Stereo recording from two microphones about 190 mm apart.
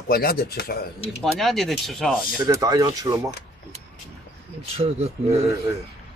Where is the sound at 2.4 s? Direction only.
20° right (ahead or behind).